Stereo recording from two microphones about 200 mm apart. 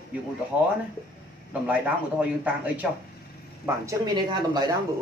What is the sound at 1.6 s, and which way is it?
Speech, 5° right (ahead or behind).